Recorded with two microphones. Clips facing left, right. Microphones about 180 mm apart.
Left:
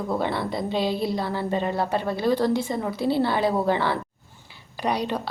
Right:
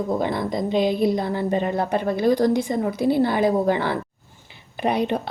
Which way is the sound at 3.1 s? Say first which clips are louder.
Right 3 dB; 50° right (ahead or behind).